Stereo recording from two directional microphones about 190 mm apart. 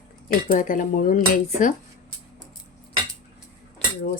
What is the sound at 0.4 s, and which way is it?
Speech, 45° left (ahead or behind).